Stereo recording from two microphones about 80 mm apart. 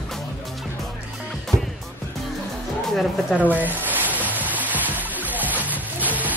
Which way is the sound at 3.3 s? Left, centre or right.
Right.